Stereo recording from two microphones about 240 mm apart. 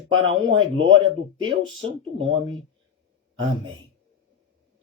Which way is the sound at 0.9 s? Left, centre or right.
Right.